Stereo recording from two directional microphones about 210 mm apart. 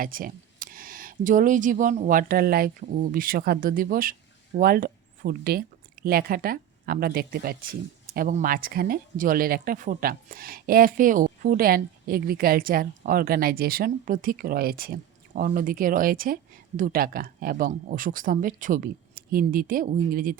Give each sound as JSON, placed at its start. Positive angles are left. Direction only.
{"t": 0.0, "sound": "speech", "side_deg": -40}